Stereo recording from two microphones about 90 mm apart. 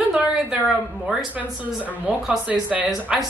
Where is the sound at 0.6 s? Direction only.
5° right (ahead or behind).